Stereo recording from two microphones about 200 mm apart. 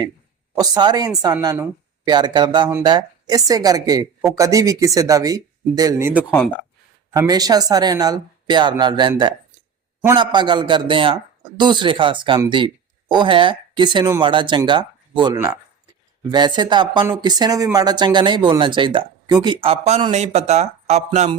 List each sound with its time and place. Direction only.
0.6 s a man's voice: 20° right (ahead or behind)
19.6 s speech: 30° right (ahead or behind)